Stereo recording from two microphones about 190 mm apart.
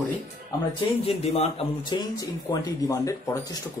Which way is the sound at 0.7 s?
30° left (ahead or behind).